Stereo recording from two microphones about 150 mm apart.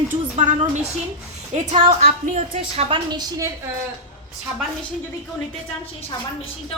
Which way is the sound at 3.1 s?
25° right (ahead or behind).